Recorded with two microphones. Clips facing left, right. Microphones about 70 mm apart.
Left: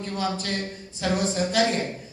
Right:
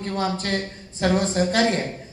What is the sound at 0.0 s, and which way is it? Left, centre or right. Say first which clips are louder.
A woman's voice: right 3 dB; right.